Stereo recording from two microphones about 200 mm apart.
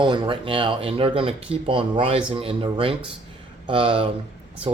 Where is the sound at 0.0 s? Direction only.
25° right (ahead or behind).